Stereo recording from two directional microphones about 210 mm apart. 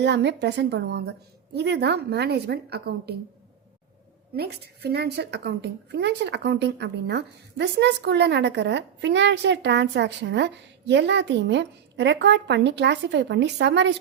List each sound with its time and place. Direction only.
0.0 s a woman's voice: 55° right (ahead or behind)
4.4 s a woman's voice: 50° right (ahead or behind)